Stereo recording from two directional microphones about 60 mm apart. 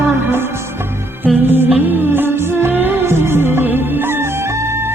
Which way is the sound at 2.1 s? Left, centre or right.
Right.